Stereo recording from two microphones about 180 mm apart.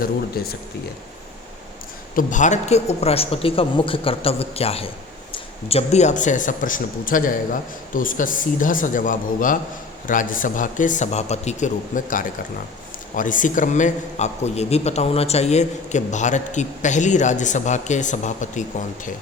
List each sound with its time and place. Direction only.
0.4 s speech: 60° left (ahead or behind)
2.1 s a man's voice: 45° left (ahead or behind)